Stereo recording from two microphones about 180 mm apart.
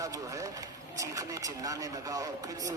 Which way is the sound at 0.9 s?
20° right (ahead or behind).